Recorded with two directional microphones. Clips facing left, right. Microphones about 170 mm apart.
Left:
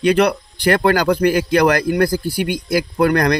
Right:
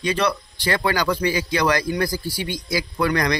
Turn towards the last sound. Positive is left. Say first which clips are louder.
# left 6 dB
turn(degrees=55)  # may be behind; listen again after turning